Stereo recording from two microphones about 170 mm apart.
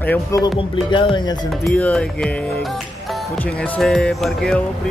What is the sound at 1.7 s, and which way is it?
Speech, 5° left (ahead or behind).